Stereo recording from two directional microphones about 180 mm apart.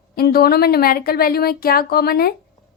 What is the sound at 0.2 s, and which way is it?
A woman's voice, 60° left (ahead or behind).